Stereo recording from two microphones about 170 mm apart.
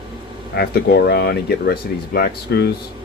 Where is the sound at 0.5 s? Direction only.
70° left (ahead or behind).